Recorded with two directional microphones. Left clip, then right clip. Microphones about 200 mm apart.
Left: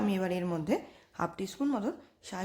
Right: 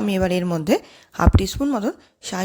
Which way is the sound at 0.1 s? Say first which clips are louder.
Right 11 dB; 40° right (ahead or behind).